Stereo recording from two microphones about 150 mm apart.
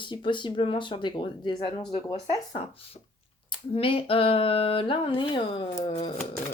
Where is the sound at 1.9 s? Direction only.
45° left (ahead or behind).